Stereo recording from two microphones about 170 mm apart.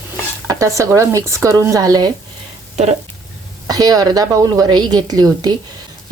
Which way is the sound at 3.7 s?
20° right (ahead or behind).